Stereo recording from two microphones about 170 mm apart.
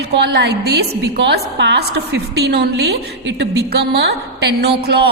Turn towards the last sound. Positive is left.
turn(degrees=-70)  # may be behind; listen again after turning